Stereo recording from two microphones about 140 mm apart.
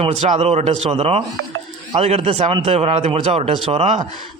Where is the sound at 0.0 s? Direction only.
50° right (ahead or behind).